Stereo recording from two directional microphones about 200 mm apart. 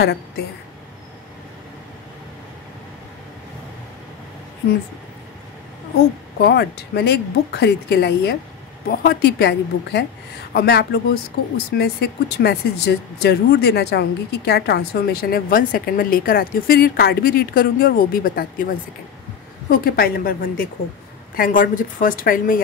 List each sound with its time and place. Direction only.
6.4 s speech: 55° left (ahead or behind)
19.7 s speech: 45° left (ahead or behind)